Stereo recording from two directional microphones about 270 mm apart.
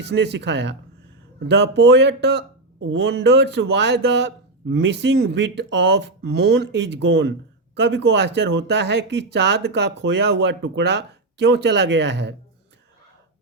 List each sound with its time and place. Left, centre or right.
0.1 s speech: right